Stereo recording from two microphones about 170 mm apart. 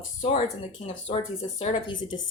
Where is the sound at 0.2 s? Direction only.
40° left (ahead or behind).